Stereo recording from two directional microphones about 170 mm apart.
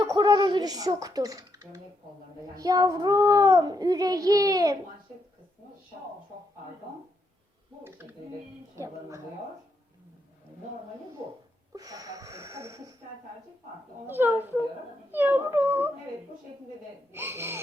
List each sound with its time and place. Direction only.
0.1 s a child's voice: 25° right (ahead or behind)
2.6 s child singing: 20° right (ahead or behind)
8.8 s speech: 15° right (ahead or behind)
11.7 s wheeze: 20° right (ahead or behind)
14.1 s speech: 10° right (ahead or behind)
17.2 s speech: 15° right (ahead or behind)